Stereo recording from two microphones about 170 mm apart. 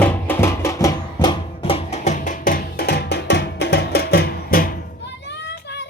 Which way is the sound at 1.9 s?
45° left (ahead or behind).